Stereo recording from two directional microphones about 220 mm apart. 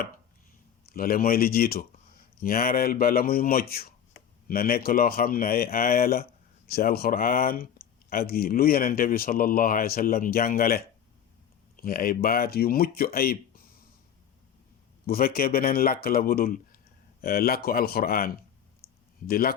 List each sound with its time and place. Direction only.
0.9 s speech: 40° left (ahead or behind)
15.0 s speech: 40° left (ahead or behind)
18.8 s a sound: 45° left (ahead or behind)
19.3 s speech: 40° left (ahead or behind)